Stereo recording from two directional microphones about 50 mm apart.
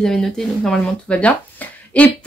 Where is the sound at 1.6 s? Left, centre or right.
Left.